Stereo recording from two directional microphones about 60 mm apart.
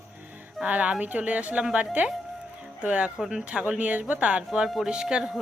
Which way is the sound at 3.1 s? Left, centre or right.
Centre.